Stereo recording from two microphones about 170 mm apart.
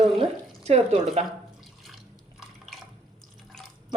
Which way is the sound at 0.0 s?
40° right (ahead or behind).